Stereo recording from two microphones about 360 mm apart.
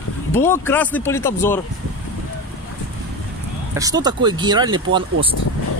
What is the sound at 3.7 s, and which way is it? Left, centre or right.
Speech, centre.